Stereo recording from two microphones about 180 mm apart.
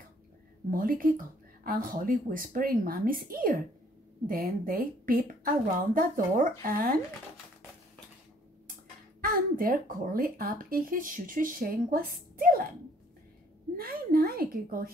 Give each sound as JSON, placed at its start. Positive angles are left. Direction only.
{"t": 0.7, "sound": "speech", "side_deg": -50}
{"t": 9.2, "sound": "speech", "side_deg": -50}
{"t": 13.7, "sound": "speech", "side_deg": -55}